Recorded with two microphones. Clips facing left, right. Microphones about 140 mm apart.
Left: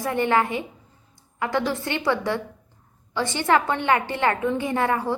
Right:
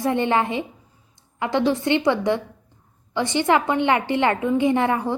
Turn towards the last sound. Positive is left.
turn(degrees=-20)  # may be behind; listen again after turning